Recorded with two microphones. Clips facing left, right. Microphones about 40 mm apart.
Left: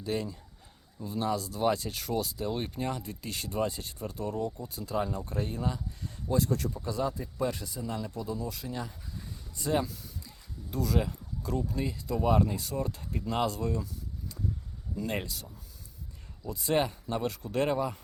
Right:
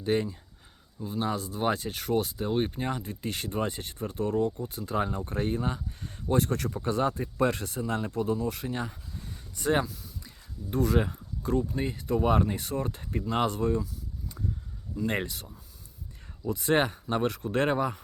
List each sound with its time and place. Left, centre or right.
0.0 s speech: right
15.0 s speech: right
16.5 s speech: right